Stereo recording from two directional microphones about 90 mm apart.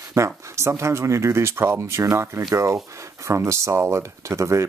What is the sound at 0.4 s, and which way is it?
Speech, 30° right (ahead or behind).